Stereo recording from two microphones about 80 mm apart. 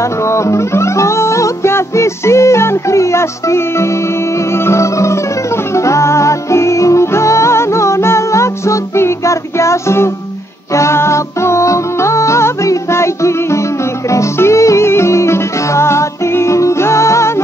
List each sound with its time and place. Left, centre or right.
0.3 s music: left